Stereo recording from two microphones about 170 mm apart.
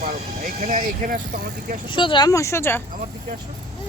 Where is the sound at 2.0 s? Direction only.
30° left (ahead or behind).